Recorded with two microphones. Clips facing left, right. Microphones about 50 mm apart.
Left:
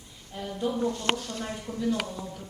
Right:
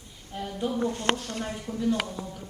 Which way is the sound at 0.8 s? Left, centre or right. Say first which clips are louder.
Right 1 dB; right.